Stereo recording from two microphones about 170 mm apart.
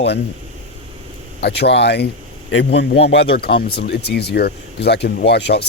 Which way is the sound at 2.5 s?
90° left.